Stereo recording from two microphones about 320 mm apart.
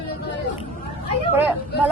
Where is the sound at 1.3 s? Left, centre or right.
Centre.